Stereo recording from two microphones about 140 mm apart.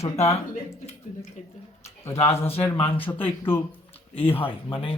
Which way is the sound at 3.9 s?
45° left (ahead or behind).